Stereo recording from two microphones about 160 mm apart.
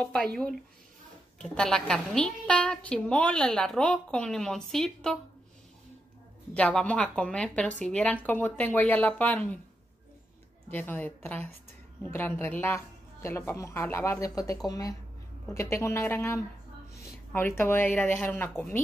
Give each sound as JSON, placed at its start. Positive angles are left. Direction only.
{"t": 0.0, "sound": "a woman's voice", "side_deg": 5}
{"t": 1.4, "sound": "a woman's voice", "side_deg": 5}
{"t": 6.5, "sound": "a woman's voice", "side_deg": 5}
{"t": 10.7, "sound": "a woman's voice", "side_deg": 10}